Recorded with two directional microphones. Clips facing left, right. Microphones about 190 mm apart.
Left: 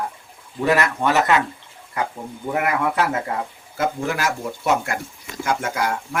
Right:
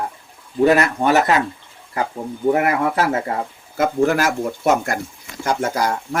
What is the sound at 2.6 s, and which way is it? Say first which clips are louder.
Speech: right 3 dB; 40° right (ahead or behind).